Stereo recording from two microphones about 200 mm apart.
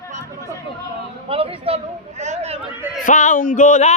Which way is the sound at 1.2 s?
30° right (ahead or behind).